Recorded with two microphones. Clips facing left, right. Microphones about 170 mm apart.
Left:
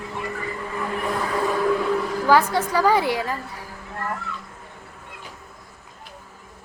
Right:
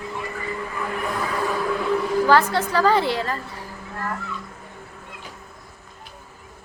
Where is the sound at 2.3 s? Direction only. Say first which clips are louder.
Left 2 dB; 10° left (ahead or behind).